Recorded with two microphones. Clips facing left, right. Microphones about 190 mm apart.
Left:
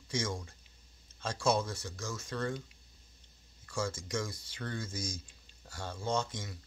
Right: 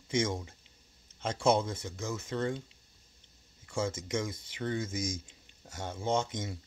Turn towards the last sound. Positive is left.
turn(degrees=-20)  # may be behind; listen again after turning